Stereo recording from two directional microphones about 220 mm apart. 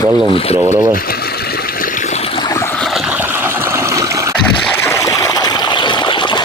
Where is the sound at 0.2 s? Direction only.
25° left (ahead or behind).